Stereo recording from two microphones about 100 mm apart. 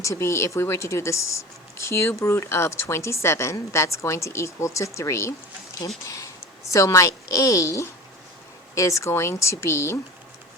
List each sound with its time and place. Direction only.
0.0 s a woman's voice: 30° left (ahead or behind)